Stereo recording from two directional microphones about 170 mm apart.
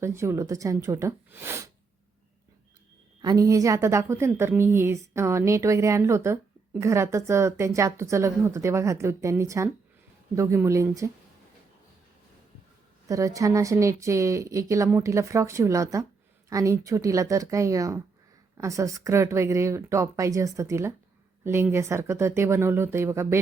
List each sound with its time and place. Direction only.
0.0 s a woman's voice: 15° right (ahead or behind)
3.2 s a woman's voice: 20° right (ahead or behind)
13.1 s a woman's voice: 20° right (ahead or behind)